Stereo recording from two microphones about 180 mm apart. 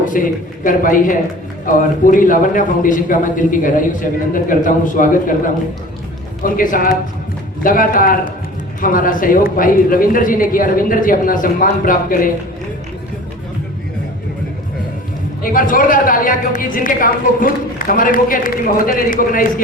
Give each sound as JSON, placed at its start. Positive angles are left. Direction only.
{"t": 0.0, "sound": "a woman's voice", "side_deg": 50}
{"t": 6.4, "sound": "a woman's voice", "side_deg": 50}
{"t": 15.5, "sound": "a woman's voice", "side_deg": 50}